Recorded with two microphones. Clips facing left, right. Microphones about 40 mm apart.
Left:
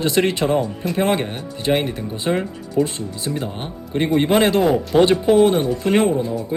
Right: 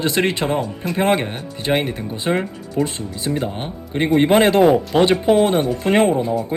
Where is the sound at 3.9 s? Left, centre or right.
Right.